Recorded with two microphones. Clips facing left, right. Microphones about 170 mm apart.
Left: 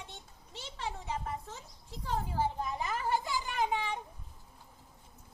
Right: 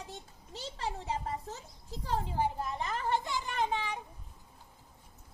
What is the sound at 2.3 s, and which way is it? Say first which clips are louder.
Children playing: even; 15° right (ahead or behind).